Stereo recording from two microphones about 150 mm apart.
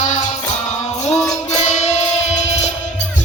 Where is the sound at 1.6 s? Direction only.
50° left (ahead or behind).